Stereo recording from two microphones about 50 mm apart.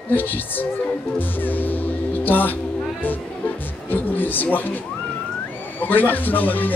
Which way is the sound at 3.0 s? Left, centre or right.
Left.